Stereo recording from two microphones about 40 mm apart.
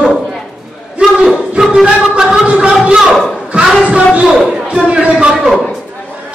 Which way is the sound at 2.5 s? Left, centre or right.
Right.